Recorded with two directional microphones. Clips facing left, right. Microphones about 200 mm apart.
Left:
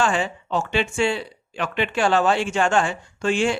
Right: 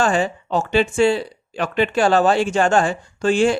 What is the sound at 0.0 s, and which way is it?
Speech, 40° right (ahead or behind).